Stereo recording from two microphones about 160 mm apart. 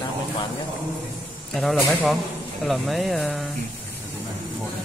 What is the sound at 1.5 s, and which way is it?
Speech, centre (ahead or behind).